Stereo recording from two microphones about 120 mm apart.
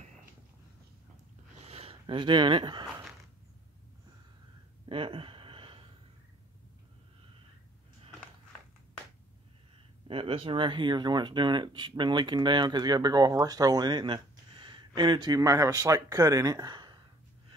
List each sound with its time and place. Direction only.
1.6 s speech: 55° right (ahead or behind); by 2.9 s 40° right (ahead or behind)
4.8 s a sound: 50° right (ahead or behind)
10.0 s speech: 50° right (ahead or behind)